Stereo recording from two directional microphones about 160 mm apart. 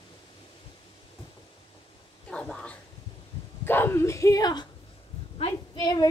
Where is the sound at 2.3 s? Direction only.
5° left (ahead or behind).